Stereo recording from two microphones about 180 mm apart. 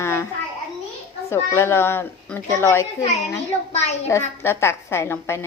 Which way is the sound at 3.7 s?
40° left (ahead or behind).